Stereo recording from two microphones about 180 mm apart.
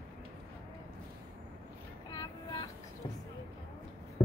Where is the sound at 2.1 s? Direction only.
20° left (ahead or behind).